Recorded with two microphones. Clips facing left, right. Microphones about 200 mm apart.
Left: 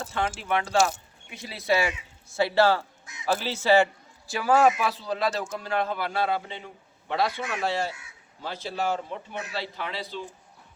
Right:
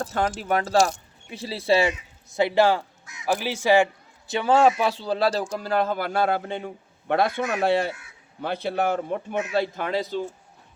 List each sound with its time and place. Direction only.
0.0 s speech: 40° right (ahead or behind); by 3.8 s 15° right (ahead or behind)
4.3 s speech: 25° right (ahead or behind); by 10.2 s 45° right (ahead or behind)